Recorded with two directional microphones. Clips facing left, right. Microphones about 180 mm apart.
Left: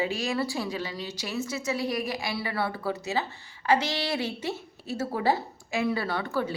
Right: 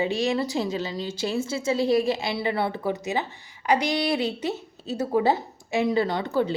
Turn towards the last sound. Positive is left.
turn(degrees=-20)  # may be behind; listen again after turning